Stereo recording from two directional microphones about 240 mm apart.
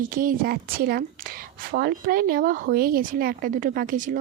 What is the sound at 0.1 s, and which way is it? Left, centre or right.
A woman's voice, right.